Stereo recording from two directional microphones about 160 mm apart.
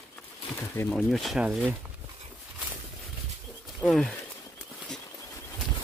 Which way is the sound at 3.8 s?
5° left (ahead or behind).